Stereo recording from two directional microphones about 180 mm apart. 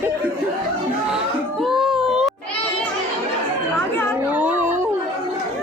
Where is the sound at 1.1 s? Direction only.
Centre (ahead or behind).